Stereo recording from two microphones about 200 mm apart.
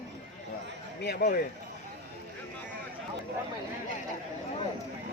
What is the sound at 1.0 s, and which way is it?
Speech, 55° left (ahead or behind).